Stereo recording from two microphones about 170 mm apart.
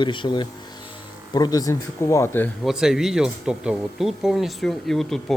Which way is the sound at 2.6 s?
5° right (ahead or behind).